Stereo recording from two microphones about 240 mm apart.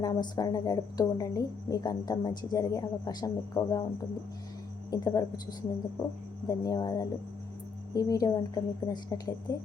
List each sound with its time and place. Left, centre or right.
0.0 s speech: centre
4.9 s speech: centre
6.5 s speech: centre